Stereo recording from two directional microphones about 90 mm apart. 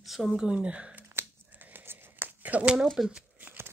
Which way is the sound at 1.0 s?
25° right (ahead or behind).